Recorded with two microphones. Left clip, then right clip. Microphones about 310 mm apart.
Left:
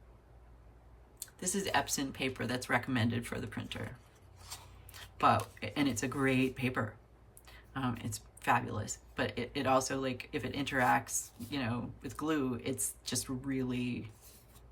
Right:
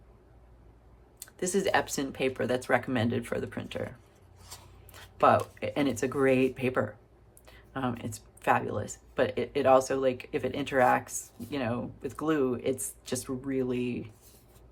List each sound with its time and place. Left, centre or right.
1.4 s speech: centre
4.4 s a sound: centre
5.1 s speech: centre